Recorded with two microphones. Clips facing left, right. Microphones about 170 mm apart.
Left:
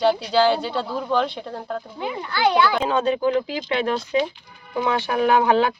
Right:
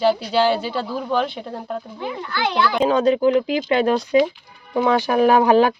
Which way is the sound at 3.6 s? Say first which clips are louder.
Right 5 dB; 40° right (ahead or behind).